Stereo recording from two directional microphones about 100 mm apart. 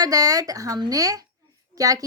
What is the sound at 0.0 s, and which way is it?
Speech, 35° right (ahead or behind).